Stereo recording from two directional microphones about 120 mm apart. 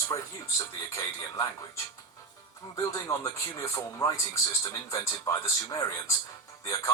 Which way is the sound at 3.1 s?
25° left (ahead or behind).